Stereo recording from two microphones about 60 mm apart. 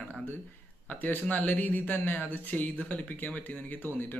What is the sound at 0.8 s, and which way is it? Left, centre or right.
Speech, left.